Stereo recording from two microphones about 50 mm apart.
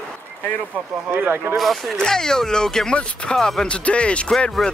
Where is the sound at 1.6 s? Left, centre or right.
Centre.